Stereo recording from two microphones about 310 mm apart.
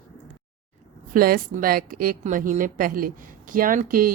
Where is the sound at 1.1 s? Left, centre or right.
Right.